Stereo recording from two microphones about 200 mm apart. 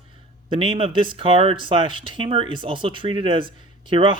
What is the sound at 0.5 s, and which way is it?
Speech, 25° right (ahead or behind).